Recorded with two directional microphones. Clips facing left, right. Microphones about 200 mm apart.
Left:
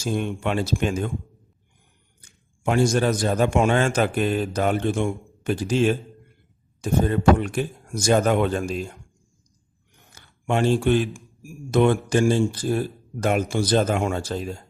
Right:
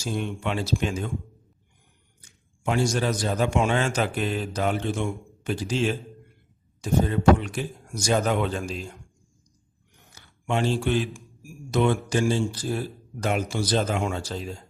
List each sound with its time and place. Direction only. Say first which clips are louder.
0.0 s a man's voice: left 4 dB; 50° left (ahead or behind)
2.6 s a man's voice: left 4 dB; 50° left (ahead or behind)
10.2 s a man's voice: left 3 dB; 50° left (ahead or behind)